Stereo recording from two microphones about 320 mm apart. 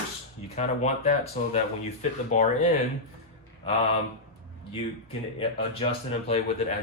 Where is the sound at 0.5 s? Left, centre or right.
Left.